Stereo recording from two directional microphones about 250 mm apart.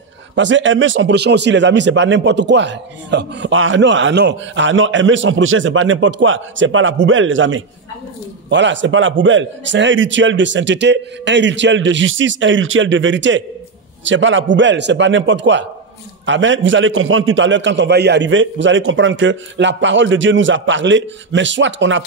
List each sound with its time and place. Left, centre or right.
0.4 s speech: right